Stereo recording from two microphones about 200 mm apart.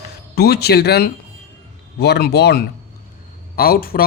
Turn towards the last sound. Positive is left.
turn(degrees=45)  # may be behind; listen again after turning